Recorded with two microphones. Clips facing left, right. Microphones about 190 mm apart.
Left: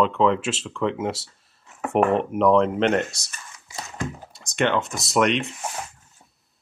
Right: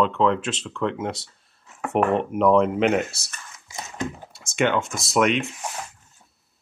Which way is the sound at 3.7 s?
20° right (ahead or behind).